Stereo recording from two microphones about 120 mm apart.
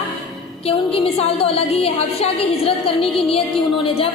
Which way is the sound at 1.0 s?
55° left (ahead or behind).